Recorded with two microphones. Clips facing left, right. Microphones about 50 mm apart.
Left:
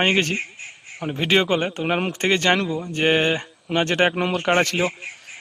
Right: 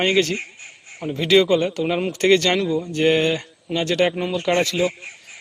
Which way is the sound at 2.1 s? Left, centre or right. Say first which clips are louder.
Right 4 dB; left.